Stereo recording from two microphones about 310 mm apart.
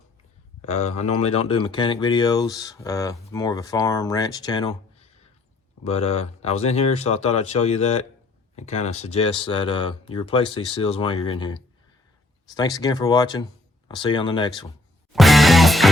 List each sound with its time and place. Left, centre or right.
0.6 s speech: left
15.1 s music: centre